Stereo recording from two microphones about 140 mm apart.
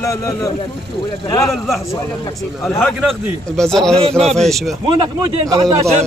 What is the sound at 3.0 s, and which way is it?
A man's voice, 5° left (ahead or behind).